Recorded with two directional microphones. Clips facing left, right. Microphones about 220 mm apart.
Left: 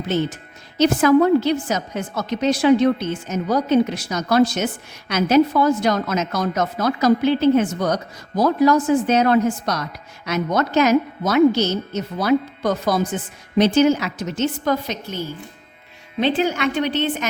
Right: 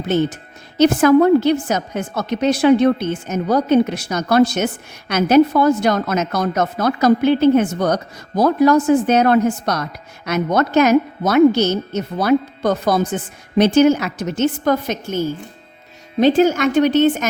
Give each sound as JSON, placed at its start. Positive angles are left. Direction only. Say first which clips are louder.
{"t": 0.8, "sound": "a woman's voice", "louder": "right 3 dB", "side_deg": -55}